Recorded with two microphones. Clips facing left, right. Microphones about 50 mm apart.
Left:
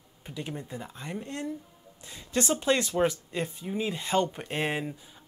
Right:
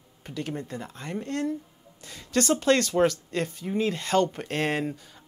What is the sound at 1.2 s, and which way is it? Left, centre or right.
Speech, right.